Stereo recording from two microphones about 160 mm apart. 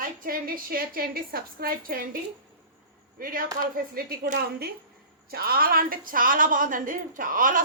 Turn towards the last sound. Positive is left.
turn(degrees=-55)  # may be behind; listen again after turning